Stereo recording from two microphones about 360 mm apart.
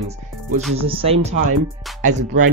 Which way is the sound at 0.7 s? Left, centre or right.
Centre.